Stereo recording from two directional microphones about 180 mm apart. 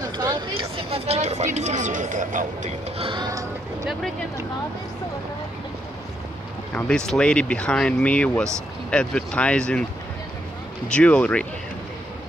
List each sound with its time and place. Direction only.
0.0 s speech: 20° right (ahead or behind); by 2.7 s 45° right (ahead or behind)
3.0 s music: 25° right (ahead or behind)
6.7 s speech: 5° left (ahead or behind)
10.9 s speech: 5° left (ahead or behind)